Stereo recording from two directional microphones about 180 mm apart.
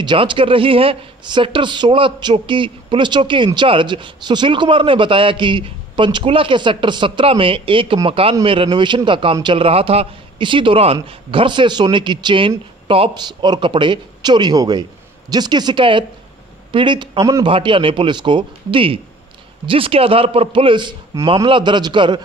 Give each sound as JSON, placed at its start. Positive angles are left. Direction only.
{"t": 0.0, "sound": "speech", "side_deg": -25}